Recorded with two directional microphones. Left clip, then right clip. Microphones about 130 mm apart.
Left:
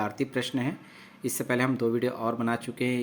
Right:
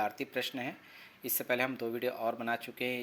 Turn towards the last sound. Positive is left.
turn(degrees=-20)  # may be behind; listen again after turning